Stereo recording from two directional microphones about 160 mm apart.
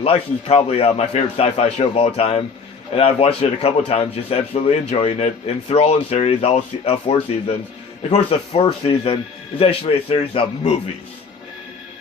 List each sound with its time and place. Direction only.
0.0 s speech: 35° left (ahead or behind)